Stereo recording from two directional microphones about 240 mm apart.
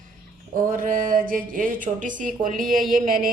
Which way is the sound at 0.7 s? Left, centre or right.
Right.